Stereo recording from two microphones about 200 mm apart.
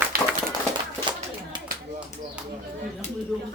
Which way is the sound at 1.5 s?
25° right (ahead or behind).